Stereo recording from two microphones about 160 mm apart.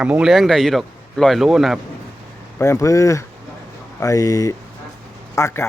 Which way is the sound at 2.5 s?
15° left (ahead or behind).